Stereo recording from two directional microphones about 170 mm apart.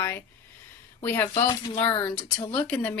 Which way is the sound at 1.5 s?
25° left (ahead or behind).